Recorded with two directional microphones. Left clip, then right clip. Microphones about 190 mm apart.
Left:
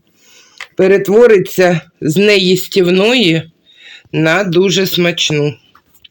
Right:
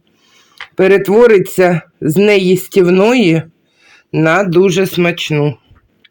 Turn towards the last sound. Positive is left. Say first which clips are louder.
# left 2 dB
turn(degrees=-20)  # may be behind; listen again after turning